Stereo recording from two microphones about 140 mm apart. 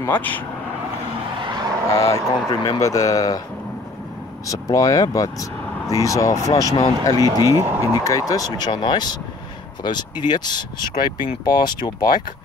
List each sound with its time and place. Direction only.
0.0 s speech: 15° left (ahead or behind)
1.4 s vehicle: 30° right (ahead or behind)
1.9 s speech: 20° left (ahead or behind)
4.5 s speech: 25° left (ahead or behind)
7.4 s speech: 20° right (ahead or behind)
7.8 s speech: 25° left (ahead or behind)